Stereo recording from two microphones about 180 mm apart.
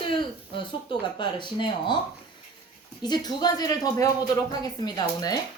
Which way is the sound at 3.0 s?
25° left (ahead or behind).